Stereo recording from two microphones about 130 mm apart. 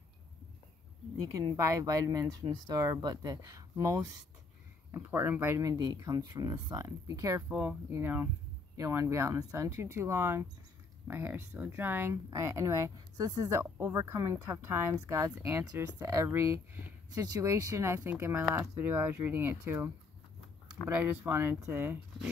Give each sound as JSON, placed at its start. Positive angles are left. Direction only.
{"t": 1.2, "sound": "speech", "side_deg": -30}
{"t": 7.4, "sound": "speech", "side_deg": -10}
{"t": 21.0, "sound": "speech", "side_deg": -15}